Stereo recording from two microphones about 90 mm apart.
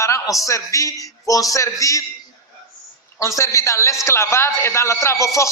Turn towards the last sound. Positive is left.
turn(degrees=35)  # may be behind; listen again after turning